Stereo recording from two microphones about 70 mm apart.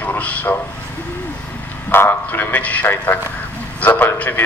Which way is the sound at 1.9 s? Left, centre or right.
Left.